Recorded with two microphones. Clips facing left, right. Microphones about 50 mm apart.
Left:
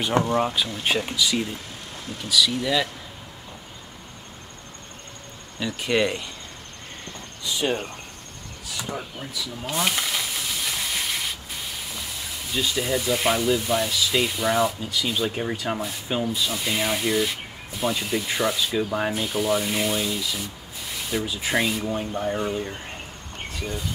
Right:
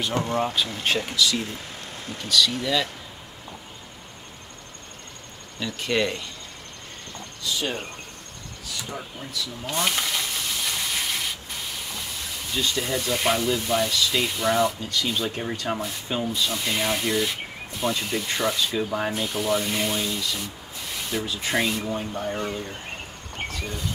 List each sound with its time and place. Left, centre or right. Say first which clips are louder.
0.1 s speech: left 7 dB; left
0.4 s speech: left 1 dB; centre
5.6 s speech: left 2 dB; centre
7.4 s speech: left 3 dB; centre
8.8 s steam: left 5 dB; centre
12.2 s speech: left 1 dB; centre